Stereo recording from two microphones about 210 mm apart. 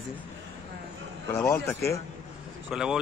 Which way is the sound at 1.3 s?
15° left (ahead or behind).